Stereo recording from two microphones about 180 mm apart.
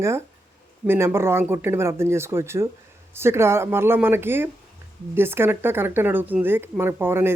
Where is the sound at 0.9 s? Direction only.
15° right (ahead or behind).